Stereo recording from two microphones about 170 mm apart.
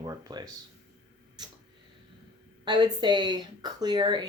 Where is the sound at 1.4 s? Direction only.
25° right (ahead or behind).